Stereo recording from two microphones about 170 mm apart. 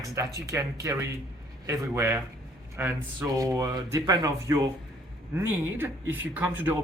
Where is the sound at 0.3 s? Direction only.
20° right (ahead or behind).